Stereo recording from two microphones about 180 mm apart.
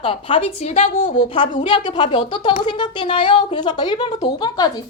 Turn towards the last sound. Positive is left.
turn(degrees=20)  # may be behind; listen again after turning